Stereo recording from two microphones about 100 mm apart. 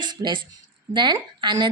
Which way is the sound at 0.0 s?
50° right (ahead or behind).